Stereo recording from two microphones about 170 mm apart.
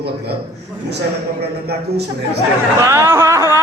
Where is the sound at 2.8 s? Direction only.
15° right (ahead or behind).